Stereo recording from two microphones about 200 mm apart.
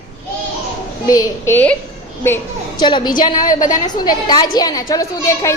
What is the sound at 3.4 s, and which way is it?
Speech, 40° left (ahead or behind).